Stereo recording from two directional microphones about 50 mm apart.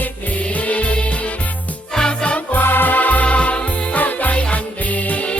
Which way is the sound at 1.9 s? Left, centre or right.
Centre.